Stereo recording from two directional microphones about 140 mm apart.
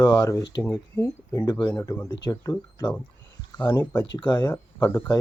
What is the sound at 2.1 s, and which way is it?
Speech, 30° left (ahead or behind).